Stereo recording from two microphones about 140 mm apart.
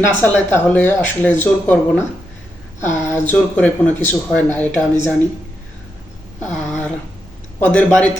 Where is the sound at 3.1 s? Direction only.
10° left (ahead or behind).